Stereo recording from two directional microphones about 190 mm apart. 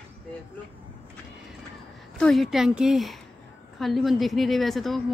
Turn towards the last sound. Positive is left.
turn(degrees=0)  # may be behind; listen again after turning